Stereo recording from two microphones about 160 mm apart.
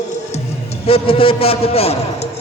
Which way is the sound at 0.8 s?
35° left (ahead or behind).